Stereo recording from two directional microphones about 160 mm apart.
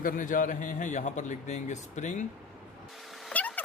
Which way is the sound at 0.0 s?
55° left (ahead or behind).